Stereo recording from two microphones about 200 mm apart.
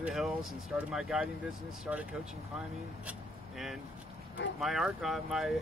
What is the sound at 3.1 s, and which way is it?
Vehicle, centre (ahead or behind).